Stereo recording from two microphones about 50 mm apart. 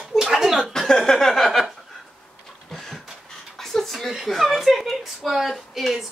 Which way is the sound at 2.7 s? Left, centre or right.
Centre.